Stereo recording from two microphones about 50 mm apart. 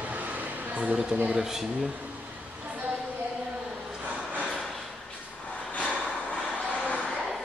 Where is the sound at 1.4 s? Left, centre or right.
Centre.